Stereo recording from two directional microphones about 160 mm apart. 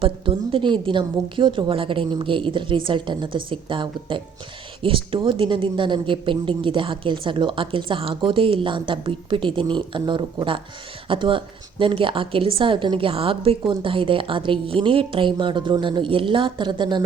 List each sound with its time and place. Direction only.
0.0 s a woman's voice: 35° right (ahead or behind)